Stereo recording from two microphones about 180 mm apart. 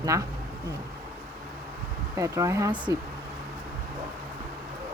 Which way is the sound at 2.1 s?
15° right (ahead or behind).